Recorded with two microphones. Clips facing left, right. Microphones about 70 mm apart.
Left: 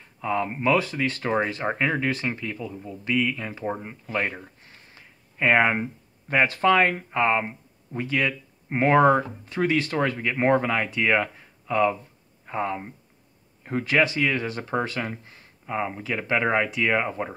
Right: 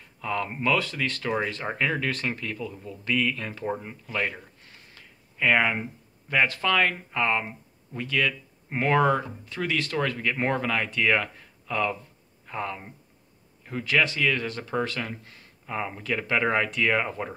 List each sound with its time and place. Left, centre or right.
0.0 s speech: centre